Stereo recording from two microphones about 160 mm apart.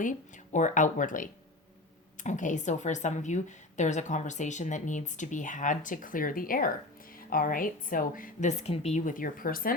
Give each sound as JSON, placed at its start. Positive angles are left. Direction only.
{"t": 0.0, "sound": "a woman's voice", "side_deg": 50}